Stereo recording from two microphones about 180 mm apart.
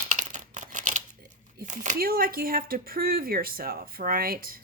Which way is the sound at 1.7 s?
50° right (ahead or behind).